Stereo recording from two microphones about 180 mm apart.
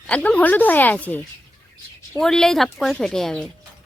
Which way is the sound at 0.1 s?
5° left (ahead or behind).